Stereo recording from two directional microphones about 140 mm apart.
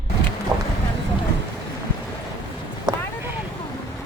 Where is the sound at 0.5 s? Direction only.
25° right (ahead or behind).